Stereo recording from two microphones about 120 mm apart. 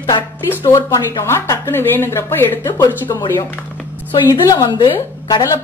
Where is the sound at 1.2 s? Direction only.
20° left (ahead or behind).